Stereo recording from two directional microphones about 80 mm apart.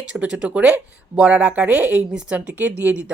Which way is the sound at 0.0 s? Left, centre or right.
Centre.